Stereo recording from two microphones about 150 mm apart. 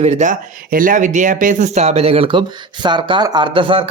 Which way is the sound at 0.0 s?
50° right (ahead or behind).